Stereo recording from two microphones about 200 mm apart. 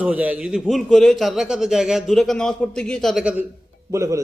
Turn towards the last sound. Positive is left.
turn(degrees=-15)  # may be behind; listen again after turning